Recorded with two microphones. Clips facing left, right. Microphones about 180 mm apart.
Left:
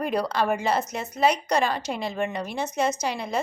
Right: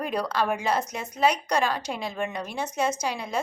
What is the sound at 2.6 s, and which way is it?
Speech, 10° right (ahead or behind).